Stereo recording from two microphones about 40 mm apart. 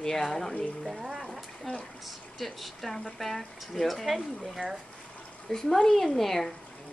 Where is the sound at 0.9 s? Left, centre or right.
Centre.